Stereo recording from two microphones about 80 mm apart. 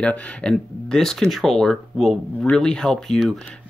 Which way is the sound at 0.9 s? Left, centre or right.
Centre.